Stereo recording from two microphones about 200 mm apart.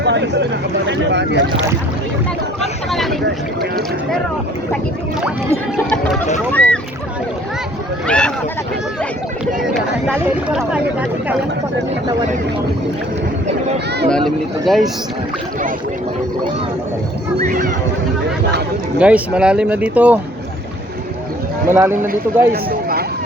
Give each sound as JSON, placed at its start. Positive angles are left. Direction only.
{"t": 0.0, "sound": "a sound", "side_deg": -60}
{"t": 0.9, "sound": "speech", "side_deg": -60}
{"t": 2.9, "sound": "a sound", "side_deg": 0}
{"t": 3.2, "sound": "speech", "side_deg": -55}
{"t": 6.5, "sound": "boat", "side_deg": 5}
{"t": 8.0, "sound": "speech", "side_deg": 5}
{"t": 9.6, "sound": "speech", "side_deg": -5}
{"t": 14.1, "sound": "speech", "side_deg": 0}
{"t": 17.4, "sound": "speech", "side_deg": -45}
{"t": 18.9, "sound": "speech", "side_deg": -5}
{"t": 21.7, "sound": "speech", "side_deg": -10}
{"t": 22.0, "sound": "speech", "side_deg": -45}